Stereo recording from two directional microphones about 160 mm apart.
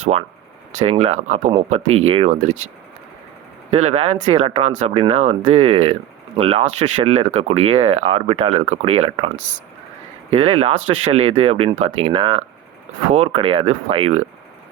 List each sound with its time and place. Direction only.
0.0 s speech: 40° right (ahead or behind)
3.7 s speech: 45° right (ahead or behind)
10.3 s speech: 40° right (ahead or behind)